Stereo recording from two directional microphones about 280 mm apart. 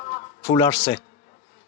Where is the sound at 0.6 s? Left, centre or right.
Centre.